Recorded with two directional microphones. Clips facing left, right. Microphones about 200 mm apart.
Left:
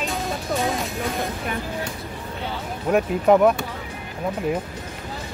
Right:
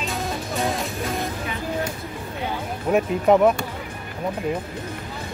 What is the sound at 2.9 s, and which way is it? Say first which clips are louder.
Speech: even; centre (ahead or behind).